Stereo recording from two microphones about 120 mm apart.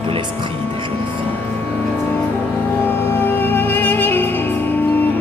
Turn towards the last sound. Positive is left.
turn(degrees=15)  # may be behind; listen again after turning